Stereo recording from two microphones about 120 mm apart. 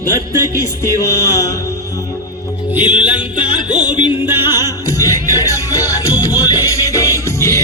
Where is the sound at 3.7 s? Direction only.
10° right (ahead or behind).